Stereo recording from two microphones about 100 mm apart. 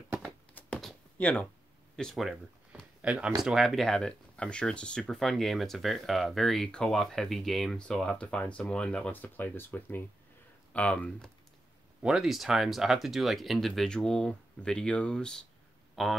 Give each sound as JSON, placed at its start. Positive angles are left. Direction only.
{"t": 0.6, "sound": "a sound", "side_deg": 15}
{"t": 1.1, "sound": "speech", "side_deg": 15}
{"t": 2.0, "sound": "speech", "side_deg": 0}
{"t": 3.0, "sound": "speech", "side_deg": -10}
{"t": 12.0, "sound": "speech", "side_deg": -5}